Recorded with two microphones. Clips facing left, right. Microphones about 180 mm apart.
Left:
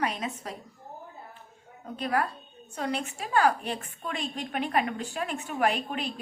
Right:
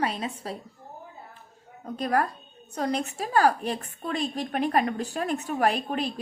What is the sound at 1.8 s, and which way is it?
A woman's voice, 40° right (ahead or behind).